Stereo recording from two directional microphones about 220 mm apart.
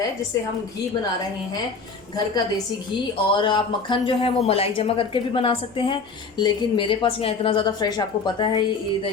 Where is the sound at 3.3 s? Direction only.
20° left (ahead or behind).